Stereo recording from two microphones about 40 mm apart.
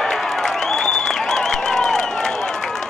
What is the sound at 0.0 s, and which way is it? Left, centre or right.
Applause, centre.